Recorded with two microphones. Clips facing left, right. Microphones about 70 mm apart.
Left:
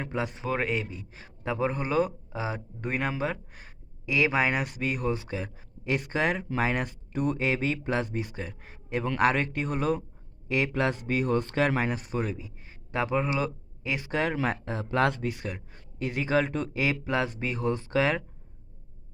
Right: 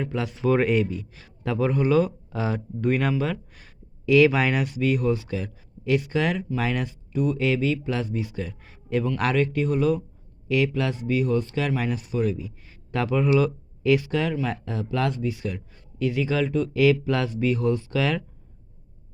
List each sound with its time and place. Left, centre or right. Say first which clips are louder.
0.0 s speech: right 3 dB; left
0.4 s speech: right 11 dB; centre; by 6.8 s left
6.8 s speech: right 4 dB; left
16.7 s speech: right 7 dB; left